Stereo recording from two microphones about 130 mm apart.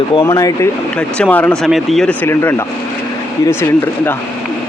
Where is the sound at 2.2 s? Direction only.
20° left (ahead or behind).